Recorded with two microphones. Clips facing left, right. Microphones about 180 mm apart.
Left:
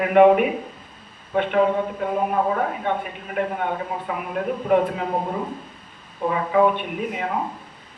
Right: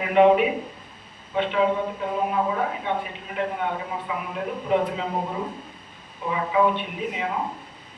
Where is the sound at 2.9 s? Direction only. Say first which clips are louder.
Left 2 dB; 50° left (ahead or behind).